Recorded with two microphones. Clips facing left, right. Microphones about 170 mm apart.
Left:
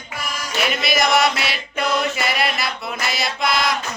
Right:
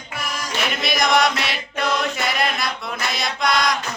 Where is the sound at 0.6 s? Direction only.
5° left (ahead or behind).